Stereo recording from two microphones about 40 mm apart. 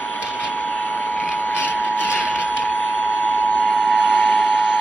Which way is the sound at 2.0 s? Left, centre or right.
Left.